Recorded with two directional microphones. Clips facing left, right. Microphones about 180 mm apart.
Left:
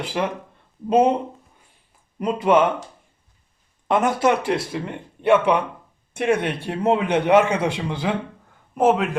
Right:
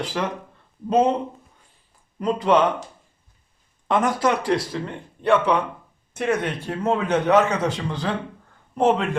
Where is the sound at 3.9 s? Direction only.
25° left (ahead or behind).